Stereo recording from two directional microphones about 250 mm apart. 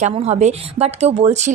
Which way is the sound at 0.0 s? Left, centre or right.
Right.